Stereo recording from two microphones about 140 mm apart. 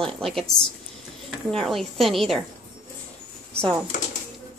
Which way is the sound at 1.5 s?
Centre (ahead or behind).